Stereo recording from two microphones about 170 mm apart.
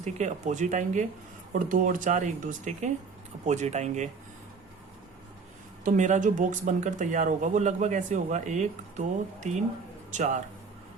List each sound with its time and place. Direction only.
0.0 s speech: 45° right (ahead or behind)
5.8 s speech: 45° right (ahead or behind)